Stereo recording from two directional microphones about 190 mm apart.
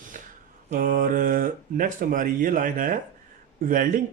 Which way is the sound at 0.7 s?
45° right (ahead or behind).